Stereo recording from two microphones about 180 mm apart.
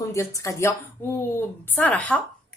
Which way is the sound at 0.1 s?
15° left (ahead or behind).